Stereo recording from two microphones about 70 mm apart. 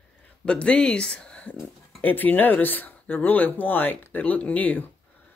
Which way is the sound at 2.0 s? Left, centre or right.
Left.